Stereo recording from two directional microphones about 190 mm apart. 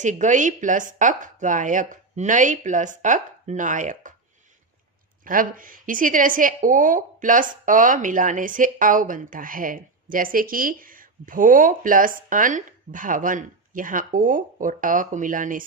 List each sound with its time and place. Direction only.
0.0 s speech: 40° right (ahead or behind)
5.2 s a woman's voice: 45° right (ahead or behind)